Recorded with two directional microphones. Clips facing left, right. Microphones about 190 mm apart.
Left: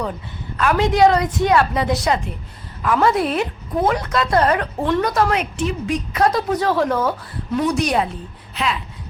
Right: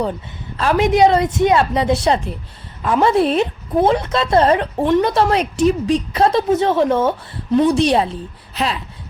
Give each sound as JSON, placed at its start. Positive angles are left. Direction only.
{"t": 0.5, "sound": "a woman's voice", "side_deg": -25}